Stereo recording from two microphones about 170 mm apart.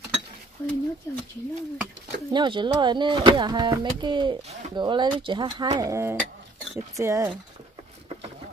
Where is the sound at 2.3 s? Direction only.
30° right (ahead or behind).